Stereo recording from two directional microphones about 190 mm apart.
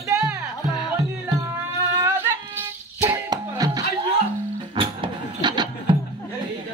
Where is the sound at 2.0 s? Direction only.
10° right (ahead or behind).